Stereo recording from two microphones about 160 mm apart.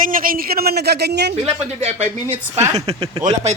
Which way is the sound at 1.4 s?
45° right (ahead or behind).